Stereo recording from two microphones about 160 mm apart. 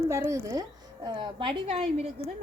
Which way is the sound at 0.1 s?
20° right (ahead or behind).